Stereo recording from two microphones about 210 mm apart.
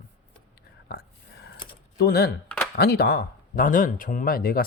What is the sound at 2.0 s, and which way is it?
Speech, 50° left (ahead or behind).